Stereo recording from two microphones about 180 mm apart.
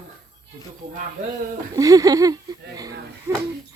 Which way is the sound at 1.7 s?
20° right (ahead or behind).